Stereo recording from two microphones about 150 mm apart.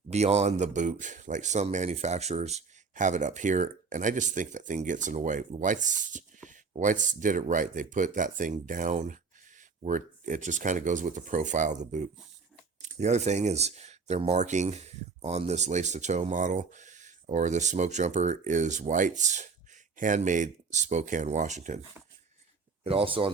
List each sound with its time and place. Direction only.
0.1 s speech: 45° right (ahead or behind)
22.8 s speech: 40° right (ahead or behind)